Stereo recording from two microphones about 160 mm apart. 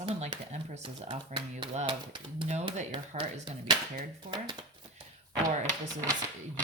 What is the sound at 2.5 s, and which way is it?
Speech, 45° right (ahead or behind).